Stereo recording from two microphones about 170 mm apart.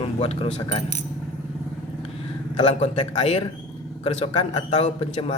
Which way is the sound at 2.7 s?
40° left (ahead or behind).